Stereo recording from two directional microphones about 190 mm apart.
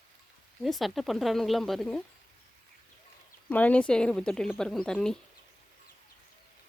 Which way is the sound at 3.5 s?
10° left (ahead or behind).